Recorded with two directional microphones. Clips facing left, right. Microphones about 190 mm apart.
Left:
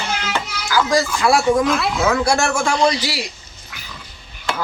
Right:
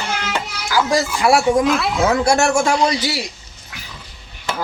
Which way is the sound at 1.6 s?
Centre (ahead or behind).